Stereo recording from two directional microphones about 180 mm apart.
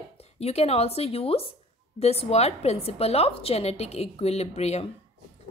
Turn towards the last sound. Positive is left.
turn(degrees=35)  # may be behind; listen again after turning